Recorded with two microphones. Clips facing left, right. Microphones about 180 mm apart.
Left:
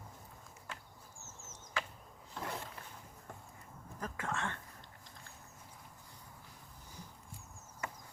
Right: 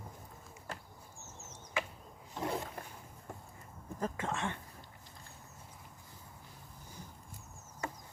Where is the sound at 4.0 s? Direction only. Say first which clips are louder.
Right 3 dB; 20° right (ahead or behind).